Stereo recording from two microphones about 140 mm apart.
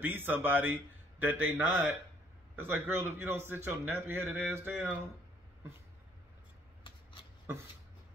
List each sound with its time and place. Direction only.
0.0 s a man's voice: 15° right (ahead or behind)